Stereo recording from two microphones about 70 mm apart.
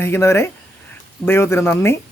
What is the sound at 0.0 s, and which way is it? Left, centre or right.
Speech, left.